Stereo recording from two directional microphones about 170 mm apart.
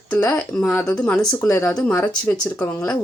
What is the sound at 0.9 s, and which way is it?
Speech, 15° left (ahead or behind).